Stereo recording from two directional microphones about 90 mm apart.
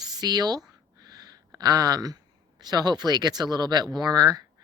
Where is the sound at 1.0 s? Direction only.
40° right (ahead or behind).